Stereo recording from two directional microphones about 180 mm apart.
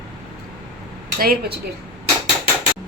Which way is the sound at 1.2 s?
60° right (ahead or behind).